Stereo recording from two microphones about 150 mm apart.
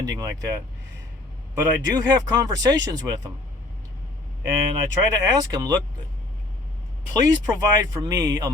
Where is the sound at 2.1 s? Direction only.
25° right (ahead or behind).